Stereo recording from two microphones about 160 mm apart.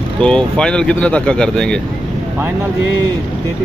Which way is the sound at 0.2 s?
5° left (ahead or behind).